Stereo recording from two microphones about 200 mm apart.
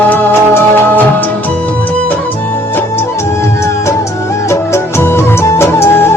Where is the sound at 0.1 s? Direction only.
10° left (ahead or behind).